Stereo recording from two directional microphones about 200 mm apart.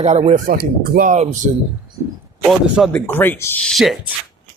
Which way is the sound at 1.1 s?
35° right (ahead or behind).